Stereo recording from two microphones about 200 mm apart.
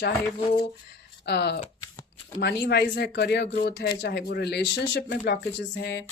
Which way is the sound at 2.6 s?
55° left (ahead or behind).